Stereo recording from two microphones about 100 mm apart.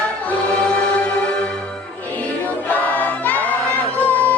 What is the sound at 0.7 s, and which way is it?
Music, 15° left (ahead or behind).